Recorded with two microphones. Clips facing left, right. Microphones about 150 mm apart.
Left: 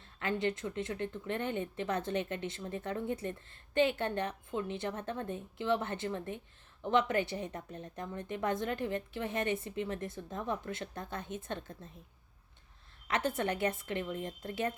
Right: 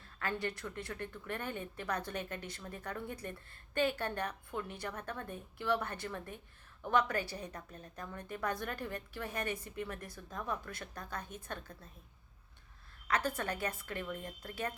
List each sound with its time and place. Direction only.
0.0 s a woman's voice: 20° left (ahead or behind)
13.1 s a woman's voice: 25° left (ahead or behind)